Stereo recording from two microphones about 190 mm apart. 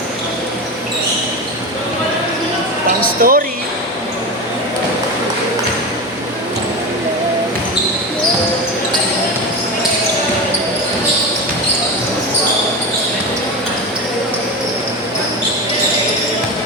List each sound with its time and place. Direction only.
3.2 s speech: 50° right (ahead or behind)